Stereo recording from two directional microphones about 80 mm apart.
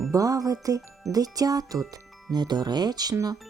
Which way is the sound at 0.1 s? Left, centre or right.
Right.